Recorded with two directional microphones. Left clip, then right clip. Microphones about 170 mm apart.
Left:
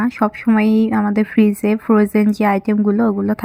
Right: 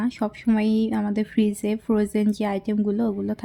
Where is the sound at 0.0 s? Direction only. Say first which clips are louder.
Left 8 dB; 10° left (ahead or behind).